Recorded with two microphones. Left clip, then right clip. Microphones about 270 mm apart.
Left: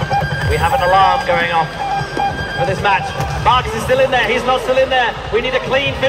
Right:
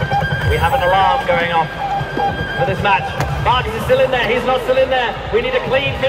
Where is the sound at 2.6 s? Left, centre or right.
Left.